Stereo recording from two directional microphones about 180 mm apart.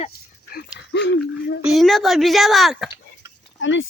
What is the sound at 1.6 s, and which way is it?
A woman's voice, centre (ahead or behind).